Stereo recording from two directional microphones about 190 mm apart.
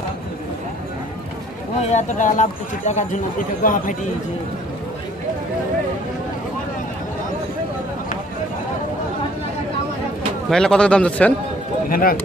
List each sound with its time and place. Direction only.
1.8 s speech: 35° left (ahead or behind)
10.5 s a man's voice: 5° left (ahead or behind)
11.9 s speech: 50° left (ahead or behind)